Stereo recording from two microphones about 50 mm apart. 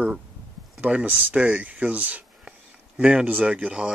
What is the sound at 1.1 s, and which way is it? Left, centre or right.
Speech, right.